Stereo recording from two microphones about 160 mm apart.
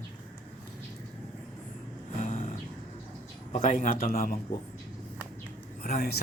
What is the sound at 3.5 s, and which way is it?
Speech, 45° left (ahead or behind).